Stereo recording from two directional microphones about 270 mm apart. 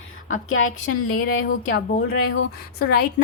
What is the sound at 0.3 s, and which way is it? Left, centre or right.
Speech, left.